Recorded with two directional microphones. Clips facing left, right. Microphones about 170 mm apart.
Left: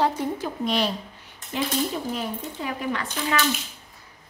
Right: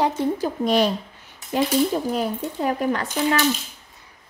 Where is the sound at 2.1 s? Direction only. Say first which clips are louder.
Right 6 dB; 40° right (ahead or behind).